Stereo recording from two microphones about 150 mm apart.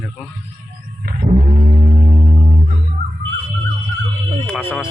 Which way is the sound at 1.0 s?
85° right.